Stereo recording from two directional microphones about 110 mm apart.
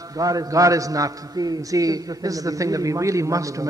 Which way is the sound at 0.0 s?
30° right (ahead or behind).